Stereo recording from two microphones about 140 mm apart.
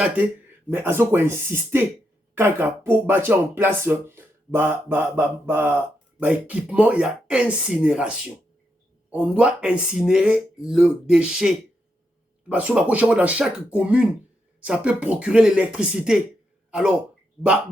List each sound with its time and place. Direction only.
0.7 s speech: 15° right (ahead or behind)